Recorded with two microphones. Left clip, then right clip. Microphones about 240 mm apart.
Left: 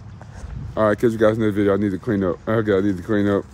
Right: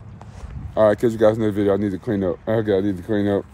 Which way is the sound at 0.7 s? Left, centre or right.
Centre.